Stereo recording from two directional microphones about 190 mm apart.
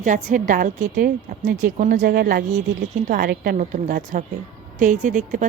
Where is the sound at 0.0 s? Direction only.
40° right (ahead or behind).